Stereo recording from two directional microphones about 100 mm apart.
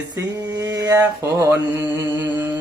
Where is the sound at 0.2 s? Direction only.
35° right (ahead or behind).